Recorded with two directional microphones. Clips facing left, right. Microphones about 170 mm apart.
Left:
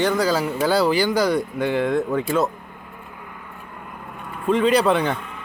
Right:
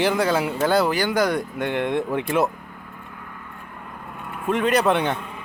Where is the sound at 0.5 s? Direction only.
10° left (ahead or behind).